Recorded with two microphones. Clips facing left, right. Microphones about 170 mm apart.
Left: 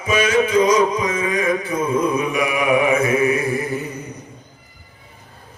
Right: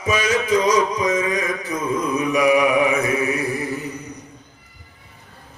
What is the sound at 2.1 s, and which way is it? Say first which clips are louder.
Mantra: right 3 dB; 35° right (ahead or behind).